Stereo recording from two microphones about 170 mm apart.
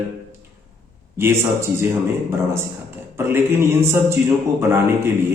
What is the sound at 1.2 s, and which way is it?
Speech, 15° right (ahead or behind).